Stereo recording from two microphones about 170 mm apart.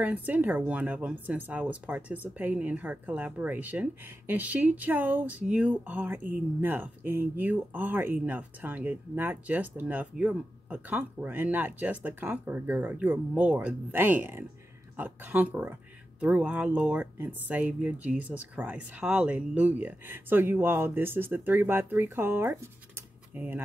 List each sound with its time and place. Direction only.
0.0 s speech: 10° right (ahead or behind)